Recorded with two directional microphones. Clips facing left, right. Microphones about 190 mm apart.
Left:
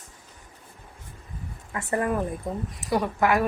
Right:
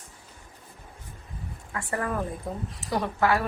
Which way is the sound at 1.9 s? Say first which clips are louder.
Left 4 dB; 20° left (ahead or behind).